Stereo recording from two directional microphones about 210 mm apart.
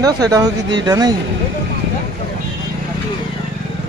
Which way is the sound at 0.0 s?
15° right (ahead or behind).